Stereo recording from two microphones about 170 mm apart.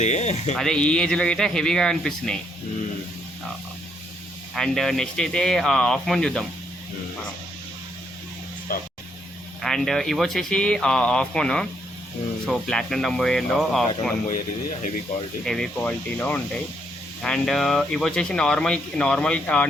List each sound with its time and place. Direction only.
0.0 s speech: 40° left (ahead or behind)
0.5 s speech: 5° left (ahead or behind)
4.5 s speech: 5° left (ahead or behind)
8.7 s speech: 55° left (ahead or behind)
9.6 s speech: 5° left (ahead or behind)
15.4 s speech: 5° left (ahead or behind)